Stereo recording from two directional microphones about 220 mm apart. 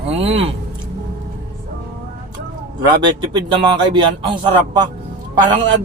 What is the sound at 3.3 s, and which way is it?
Speech, 20° right (ahead or behind).